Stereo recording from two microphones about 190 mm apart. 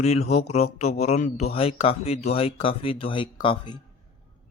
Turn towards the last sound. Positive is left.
turn(degrees=25)  # may be behind; listen again after turning